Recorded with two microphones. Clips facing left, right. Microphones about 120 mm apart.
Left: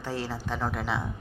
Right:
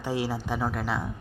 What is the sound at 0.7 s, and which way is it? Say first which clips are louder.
Speech: right 1 dB; centre (ahead or behind).